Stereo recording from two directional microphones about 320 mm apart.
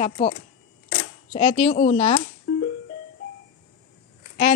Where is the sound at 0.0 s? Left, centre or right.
Left.